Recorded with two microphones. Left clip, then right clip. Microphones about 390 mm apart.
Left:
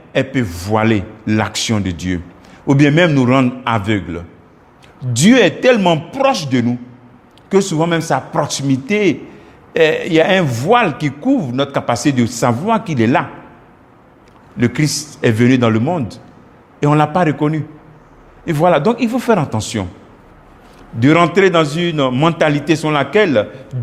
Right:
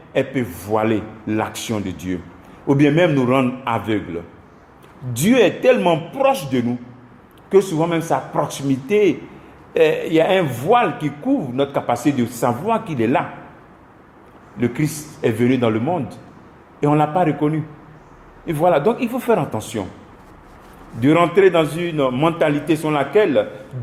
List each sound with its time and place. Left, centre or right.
0.1 s a man's voice: left
7.5 s a man's voice: left
14.6 s a man's voice: left
21.0 s a man's voice: left